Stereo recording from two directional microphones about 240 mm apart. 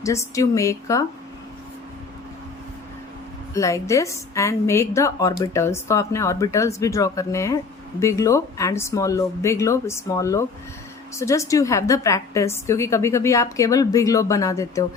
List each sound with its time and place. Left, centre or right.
0.0 s speech: centre
3.5 s speech: centre